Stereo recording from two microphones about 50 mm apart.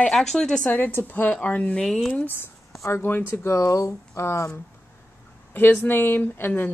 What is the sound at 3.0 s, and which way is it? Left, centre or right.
Speech, left.